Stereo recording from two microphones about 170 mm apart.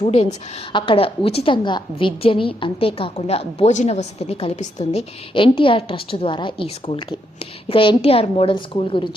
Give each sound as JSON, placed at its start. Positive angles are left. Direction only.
{"t": 0.0, "sound": "a woman's voice", "side_deg": 40}